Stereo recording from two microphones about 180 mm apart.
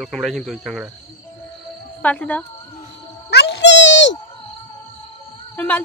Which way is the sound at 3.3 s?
70° left (ahead or behind).